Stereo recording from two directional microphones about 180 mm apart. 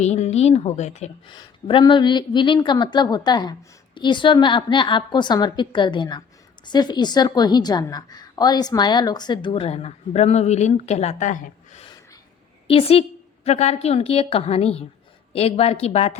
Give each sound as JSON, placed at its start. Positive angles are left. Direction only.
{"t": 0.0, "sound": "speech", "side_deg": 40}
{"t": 1.3, "sound": "a woman's voice", "side_deg": 25}